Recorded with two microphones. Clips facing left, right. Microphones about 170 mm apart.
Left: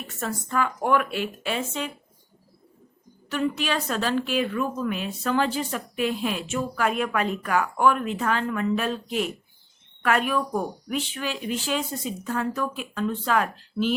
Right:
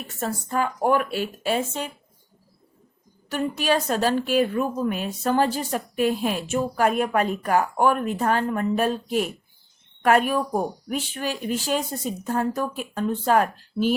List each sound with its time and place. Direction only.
0.2 s speech: 35° right (ahead or behind)
3.2 s a woman's voice: 45° right (ahead or behind)